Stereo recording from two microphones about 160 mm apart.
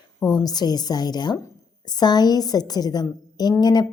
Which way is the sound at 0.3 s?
25° left (ahead or behind).